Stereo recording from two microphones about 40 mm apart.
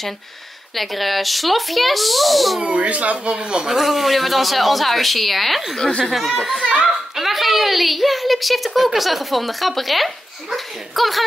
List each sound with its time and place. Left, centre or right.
0.7 s a woman's voice: centre
2.6 s speech: right
3.6 s a woman's voice: centre
5.8 s speech: left
6.1 s a woman's voice: centre